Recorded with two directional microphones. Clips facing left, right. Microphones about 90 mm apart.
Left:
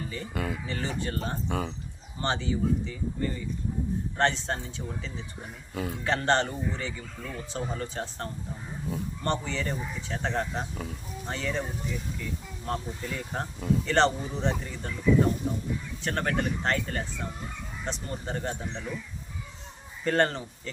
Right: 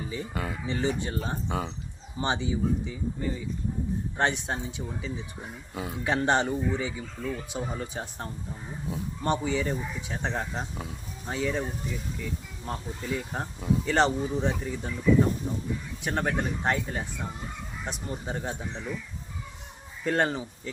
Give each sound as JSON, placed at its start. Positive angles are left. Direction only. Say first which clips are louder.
{"t": 0.0, "sound": "speech", "louder": "even", "side_deg": -10}
{"t": 12.6, "sound": "speech", "louder": "left 1 dB", "side_deg": -5}
{"t": 16.0, "sound": "speech", "louder": "even", "side_deg": -10}
{"t": 20.1, "sound": "speech", "louder": "left 1 dB", "side_deg": -5}